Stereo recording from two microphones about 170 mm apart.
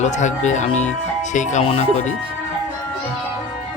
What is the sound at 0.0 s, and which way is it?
Speech, 45° left (ahead or behind).